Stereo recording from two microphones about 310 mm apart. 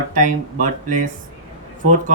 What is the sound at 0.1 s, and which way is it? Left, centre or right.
Speech, right.